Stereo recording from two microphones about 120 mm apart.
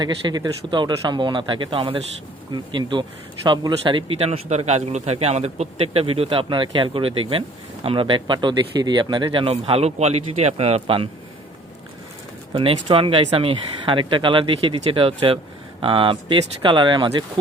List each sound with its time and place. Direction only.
0.0 s speech: 40° right (ahead or behind)
12.5 s speech: 50° right (ahead or behind)